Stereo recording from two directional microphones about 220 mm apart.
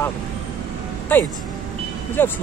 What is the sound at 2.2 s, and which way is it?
Speech, 10° left (ahead or behind).